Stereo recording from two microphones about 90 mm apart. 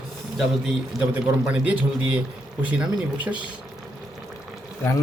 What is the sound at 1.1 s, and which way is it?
Speech, 20° right (ahead or behind).